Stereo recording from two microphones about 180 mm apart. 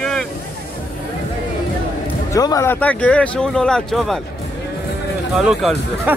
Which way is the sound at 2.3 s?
20° left (ahead or behind).